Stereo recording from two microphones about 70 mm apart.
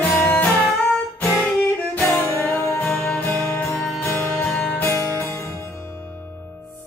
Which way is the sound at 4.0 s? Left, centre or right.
Left.